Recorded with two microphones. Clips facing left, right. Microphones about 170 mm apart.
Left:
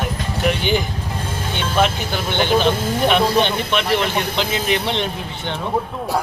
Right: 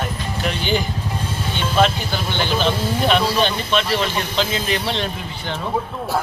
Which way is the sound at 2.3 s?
15° left (ahead or behind).